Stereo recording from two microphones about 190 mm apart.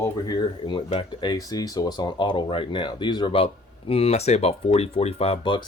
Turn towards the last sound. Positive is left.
turn(degrees=25)  # may be behind; listen again after turning